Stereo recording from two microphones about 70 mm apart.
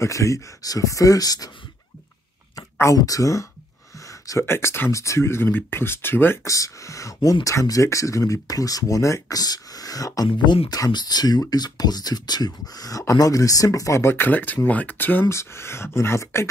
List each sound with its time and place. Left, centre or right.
0.0 s speech: left
2.5 s speech: left
4.0 s a sound: left
4.5 s speech: left
6.4 s speech: left
13.0 s speech: left
14.1 s speech: left
15.2 s speech: left